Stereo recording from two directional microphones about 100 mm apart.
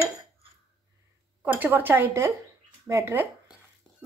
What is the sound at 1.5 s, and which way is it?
Speech, 20° right (ahead or behind).